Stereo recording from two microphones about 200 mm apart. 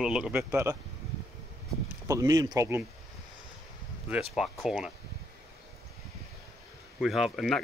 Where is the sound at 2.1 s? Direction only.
15° right (ahead or behind).